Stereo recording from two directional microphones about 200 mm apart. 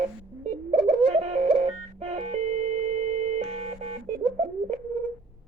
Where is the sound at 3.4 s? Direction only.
30° right (ahead or behind).